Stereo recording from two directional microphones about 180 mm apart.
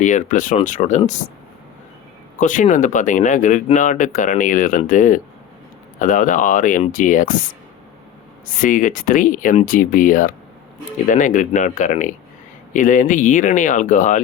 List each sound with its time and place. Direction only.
0.0 s speech: 45° left (ahead or behind)
2.4 s speech: 45° left (ahead or behind)
8.4 s speech: 50° left (ahead or behind)